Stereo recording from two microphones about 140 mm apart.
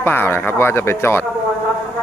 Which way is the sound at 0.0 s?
15° left (ahead or behind).